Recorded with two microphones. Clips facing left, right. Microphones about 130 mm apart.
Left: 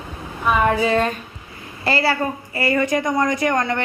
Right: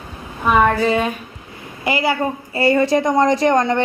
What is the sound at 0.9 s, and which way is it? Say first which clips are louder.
A man's voice: right 1 dB; 10° right (ahead or behind).